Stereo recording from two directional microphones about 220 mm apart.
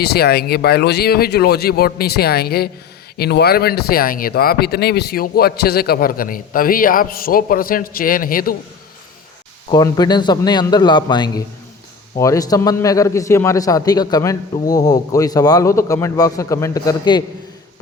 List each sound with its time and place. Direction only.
0.0 s speech: 45° left (ahead or behind)
9.6 s a man's voice: 20° left (ahead or behind)